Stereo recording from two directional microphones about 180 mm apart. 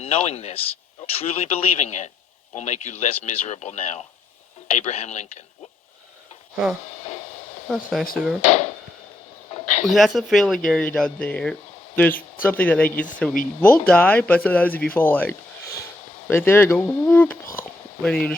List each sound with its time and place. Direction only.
0.0 s speech: 35° left (ahead or behind)
7.7 s speech: centre (ahead or behind)
8.4 s speech: 35° left (ahead or behind)
9.6 s a sound: 40° left (ahead or behind)
9.8 s speech: centre (ahead or behind)
16.6 s speech: 5° left (ahead or behind)